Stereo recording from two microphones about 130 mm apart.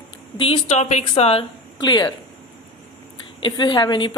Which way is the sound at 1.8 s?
35° left (ahead or behind).